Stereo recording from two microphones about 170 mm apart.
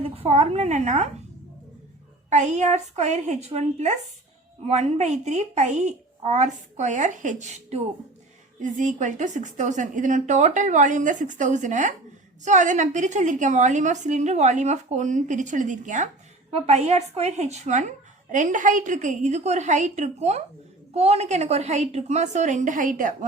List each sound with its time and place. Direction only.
0.0 s a woman's voice: 35° right (ahead or behind)
2.3 s speech: 45° right (ahead or behind)